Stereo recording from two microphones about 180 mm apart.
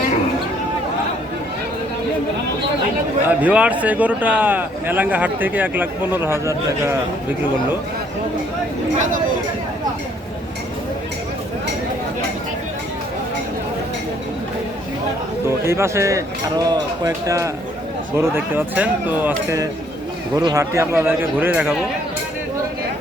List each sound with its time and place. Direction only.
3.2 s a man's voice: 10° right (ahead or behind)
15.4 s a man's voice: 15° right (ahead or behind)